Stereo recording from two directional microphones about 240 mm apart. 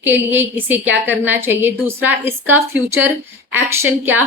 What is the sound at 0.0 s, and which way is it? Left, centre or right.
A woman's voice, centre.